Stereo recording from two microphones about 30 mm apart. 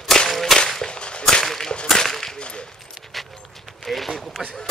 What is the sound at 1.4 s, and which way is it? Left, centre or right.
Whip, centre.